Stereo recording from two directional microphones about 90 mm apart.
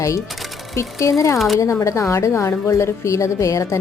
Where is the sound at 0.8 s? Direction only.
35° left (ahead or behind).